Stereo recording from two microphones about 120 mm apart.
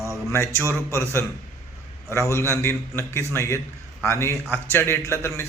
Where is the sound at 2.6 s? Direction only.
20° left (ahead or behind).